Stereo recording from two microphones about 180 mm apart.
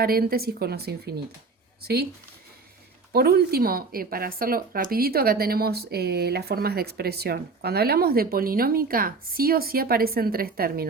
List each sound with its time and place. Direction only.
0.0 s speech: 55° right (ahead or behind)
3.1 s speech: 60° right (ahead or behind)